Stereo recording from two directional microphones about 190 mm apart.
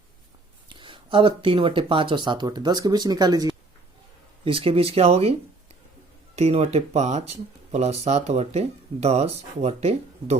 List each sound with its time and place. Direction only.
0.7 s speech: 25° right (ahead or behind)